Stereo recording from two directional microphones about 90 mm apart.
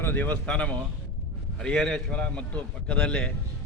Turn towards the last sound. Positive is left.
turn(degrees=10)  # may be behind; listen again after turning